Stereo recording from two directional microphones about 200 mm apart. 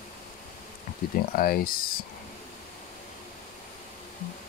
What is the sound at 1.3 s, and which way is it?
Speech, 45° left (ahead or behind).